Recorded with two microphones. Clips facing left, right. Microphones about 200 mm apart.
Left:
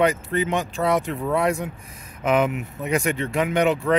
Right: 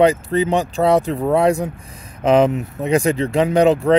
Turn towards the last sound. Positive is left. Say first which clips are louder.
# right 6 dB
turn(degrees=-35)  # may be behind; listen again after turning